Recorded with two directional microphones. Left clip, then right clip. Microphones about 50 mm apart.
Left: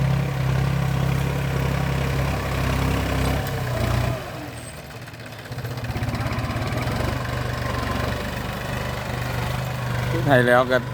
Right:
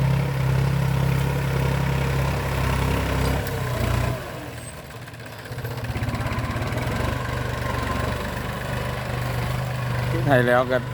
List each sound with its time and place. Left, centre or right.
1.1 s vehicle: centre
3.8 s vehicle: left
6.1 s vehicle: left
8.7 s vehicle: left
10.2 s speech: left